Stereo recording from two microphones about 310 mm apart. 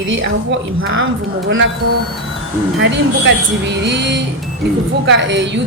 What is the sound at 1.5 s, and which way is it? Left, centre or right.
Speech, right.